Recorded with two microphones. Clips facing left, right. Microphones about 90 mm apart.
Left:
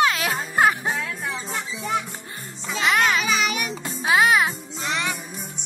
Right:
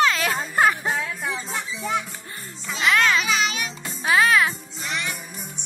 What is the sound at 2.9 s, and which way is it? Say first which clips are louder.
Music: right 1 dB; 15° left (ahead or behind).